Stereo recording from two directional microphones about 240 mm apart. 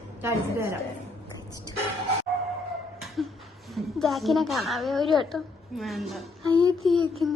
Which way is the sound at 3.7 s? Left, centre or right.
Centre.